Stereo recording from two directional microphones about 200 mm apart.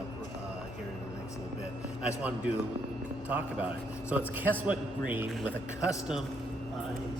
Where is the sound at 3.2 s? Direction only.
5° right (ahead or behind).